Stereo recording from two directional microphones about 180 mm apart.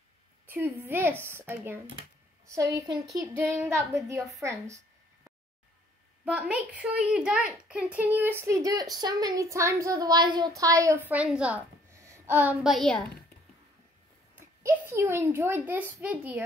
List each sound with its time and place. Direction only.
0.5 s speech: 10° right (ahead or behind)
6.2 s speech: 5° right (ahead or behind)
12.7 s a woman's voice: 5° left (ahead or behind)
14.9 s speech: 15° right (ahead or behind)